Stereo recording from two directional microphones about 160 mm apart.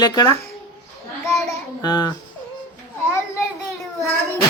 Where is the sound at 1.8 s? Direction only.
25° left (ahead or behind).